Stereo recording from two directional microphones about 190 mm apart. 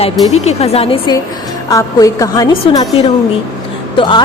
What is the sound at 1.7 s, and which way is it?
Speech, 20° left (ahead or behind).